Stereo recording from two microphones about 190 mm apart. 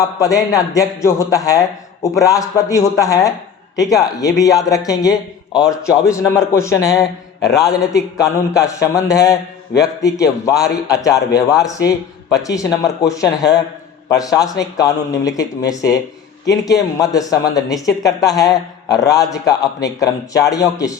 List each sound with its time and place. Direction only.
0.0 s a man's voice: 15° left (ahead or behind)
5.8 s a man's voice: 15° left (ahead or behind)